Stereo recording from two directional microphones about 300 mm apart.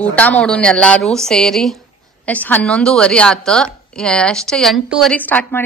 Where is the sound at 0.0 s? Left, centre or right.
Centre.